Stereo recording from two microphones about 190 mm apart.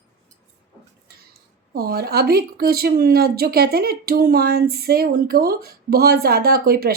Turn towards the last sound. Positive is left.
turn(degrees=-50)  # may be behind; listen again after turning